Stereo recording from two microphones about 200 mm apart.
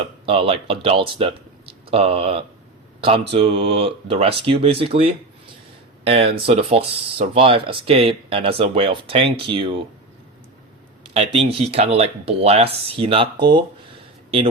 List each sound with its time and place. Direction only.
0.0 s speech: 30° right (ahead or behind)
6.1 s speech: 30° right (ahead or behind)
11.0 s a man's voice: 25° right (ahead or behind)